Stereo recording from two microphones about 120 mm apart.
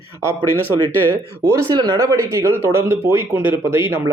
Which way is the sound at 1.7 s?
40° right (ahead or behind).